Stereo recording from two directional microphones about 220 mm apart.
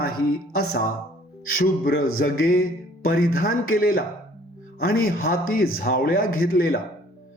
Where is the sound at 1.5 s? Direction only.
40° left (ahead or behind).